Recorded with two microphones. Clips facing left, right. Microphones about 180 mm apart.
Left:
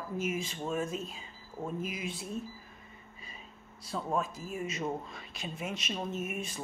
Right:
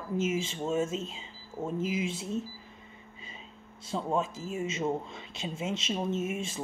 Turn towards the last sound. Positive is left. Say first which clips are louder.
# right 5 dB
turn(degrees=-25)  # may be behind; listen again after turning